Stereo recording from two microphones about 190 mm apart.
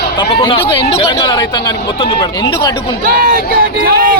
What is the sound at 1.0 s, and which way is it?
Speech, 15° left (ahead or behind).